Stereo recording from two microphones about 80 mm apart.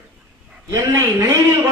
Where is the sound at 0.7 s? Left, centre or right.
Right.